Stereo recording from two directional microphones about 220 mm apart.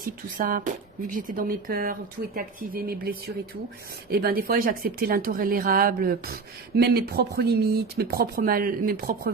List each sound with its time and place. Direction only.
0.0 s speech: 40° right (ahead or behind)